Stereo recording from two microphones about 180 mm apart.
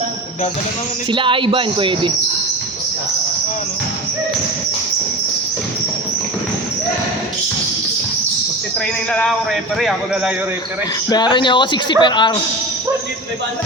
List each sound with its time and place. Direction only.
1.1 s speech: 30° right (ahead or behind)
11.1 s speech: 25° left (ahead or behind)